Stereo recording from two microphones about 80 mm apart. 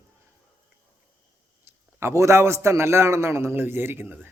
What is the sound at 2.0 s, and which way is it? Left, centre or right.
A man's voice, right.